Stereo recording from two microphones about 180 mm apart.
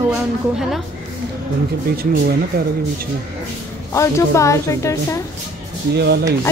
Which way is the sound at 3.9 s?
15° left (ahead or behind).